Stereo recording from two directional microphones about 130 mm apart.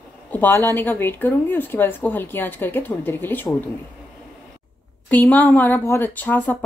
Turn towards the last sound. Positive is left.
turn(degrees=10)  # may be behind; listen again after turning